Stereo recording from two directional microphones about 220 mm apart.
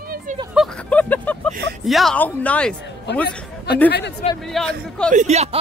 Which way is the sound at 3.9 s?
50° left (ahead or behind).